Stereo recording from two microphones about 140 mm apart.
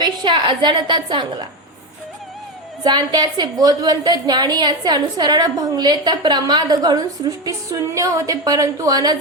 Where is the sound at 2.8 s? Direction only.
30° right (ahead or behind).